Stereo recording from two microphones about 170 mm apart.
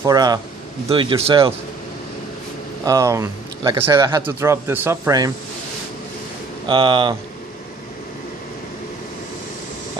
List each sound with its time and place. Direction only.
0.0 s speech: 20° right (ahead or behind)
0.9 s a man's voice: 35° right (ahead or behind)
2.8 s speech: 20° right (ahead or behind)
6.7 s speech: 30° right (ahead or behind)